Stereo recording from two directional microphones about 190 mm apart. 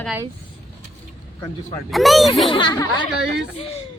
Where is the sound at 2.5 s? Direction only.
25° left (ahead or behind).